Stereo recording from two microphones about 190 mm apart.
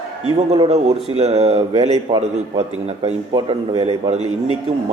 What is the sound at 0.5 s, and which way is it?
Speech, 35° right (ahead or behind).